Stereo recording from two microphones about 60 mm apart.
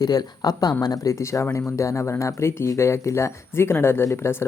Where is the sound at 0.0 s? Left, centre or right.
Left.